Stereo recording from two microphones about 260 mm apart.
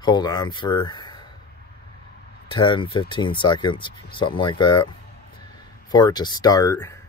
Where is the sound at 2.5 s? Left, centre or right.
Centre.